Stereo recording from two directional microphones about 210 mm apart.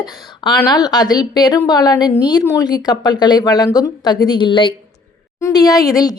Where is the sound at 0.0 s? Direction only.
20° left (ahead or behind).